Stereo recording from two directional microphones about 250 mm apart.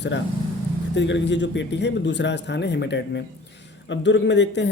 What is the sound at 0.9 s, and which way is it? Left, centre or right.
Speech, left.